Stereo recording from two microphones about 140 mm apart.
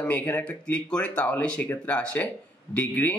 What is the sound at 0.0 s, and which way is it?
Speech, 10° left (ahead or behind).